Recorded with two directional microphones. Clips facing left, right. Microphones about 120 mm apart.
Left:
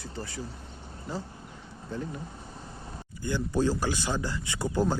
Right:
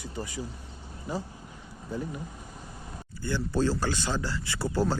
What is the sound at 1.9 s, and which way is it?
Speech, 10° right (ahead or behind).